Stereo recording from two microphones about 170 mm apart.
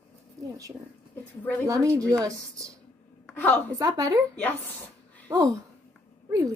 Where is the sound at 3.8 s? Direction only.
20° right (ahead or behind).